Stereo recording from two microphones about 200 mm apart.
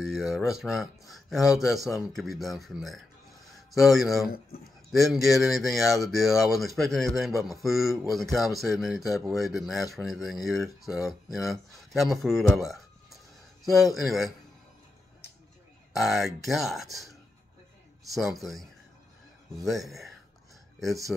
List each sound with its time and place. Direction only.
0.0 s speech: centre (ahead or behind)
4.5 s speech: 45° left (ahead or behind)
4.9 s speech: centre (ahead or behind)
16.0 s speech: centre (ahead or behind)
18.1 s speech: centre (ahead or behind)